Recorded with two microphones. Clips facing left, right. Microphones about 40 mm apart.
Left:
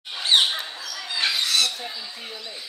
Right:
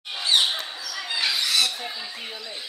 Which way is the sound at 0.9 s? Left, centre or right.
Right.